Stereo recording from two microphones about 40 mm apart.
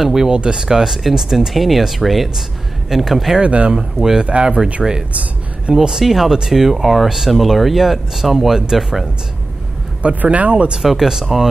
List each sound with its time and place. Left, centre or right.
0.0 s speech: centre
0.3 s speech: right; by 3.3 s centre
3.3 s speech: right
3.7 s speech: centre
4.8 s speech: centre
5.7 s speech: centre
10.0 s speech: right
10.8 s speech: centre